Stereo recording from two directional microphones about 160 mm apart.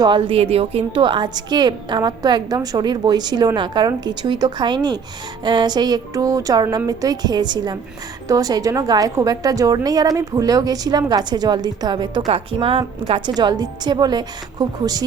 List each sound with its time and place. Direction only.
0.0 s a woman's voice: 30° right (ahead or behind)